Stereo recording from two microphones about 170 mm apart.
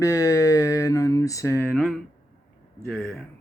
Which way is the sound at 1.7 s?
5° left (ahead or behind).